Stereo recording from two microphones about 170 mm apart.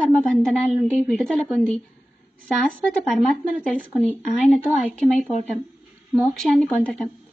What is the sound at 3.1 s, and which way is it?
A woman's voice, 5° right (ahead or behind).